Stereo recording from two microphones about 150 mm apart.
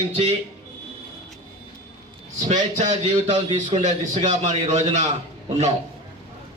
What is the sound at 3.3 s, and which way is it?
Speech, 35° right (ahead or behind).